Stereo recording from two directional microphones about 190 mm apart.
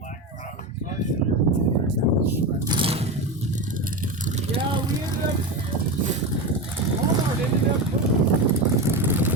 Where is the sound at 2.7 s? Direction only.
30° right (ahead or behind).